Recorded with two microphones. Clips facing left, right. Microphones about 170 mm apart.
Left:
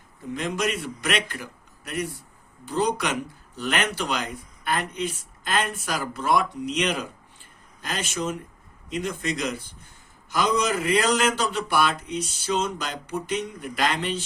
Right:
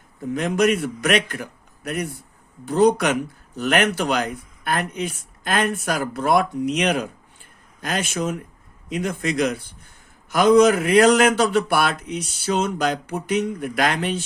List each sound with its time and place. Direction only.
0.3 s speech: 55° right (ahead or behind)
2.6 s a man's voice: 55° right (ahead or behind)